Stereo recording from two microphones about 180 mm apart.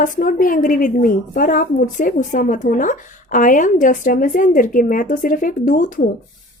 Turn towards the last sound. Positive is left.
turn(degrees=45)  # may be behind; listen again after turning